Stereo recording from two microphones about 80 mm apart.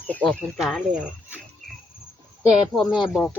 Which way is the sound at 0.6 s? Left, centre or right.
Centre.